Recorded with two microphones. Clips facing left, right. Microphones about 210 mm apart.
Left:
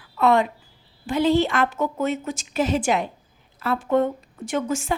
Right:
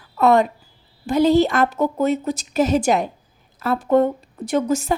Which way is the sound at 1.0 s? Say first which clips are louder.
Right 4 dB; 40° right (ahead or behind).